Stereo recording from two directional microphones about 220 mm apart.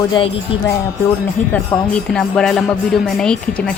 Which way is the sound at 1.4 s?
35° left (ahead or behind).